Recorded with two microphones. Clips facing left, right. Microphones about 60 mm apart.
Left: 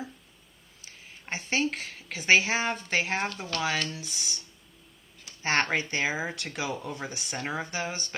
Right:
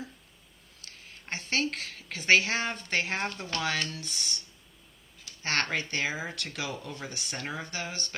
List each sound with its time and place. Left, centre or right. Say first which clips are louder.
0.8 s a woman's voice: left 1 dB; centre
5.2 s speech: left 4 dB; left